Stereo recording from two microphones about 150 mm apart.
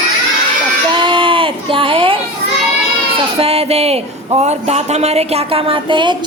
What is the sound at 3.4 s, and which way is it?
A woman's voice, 40° right (ahead or behind).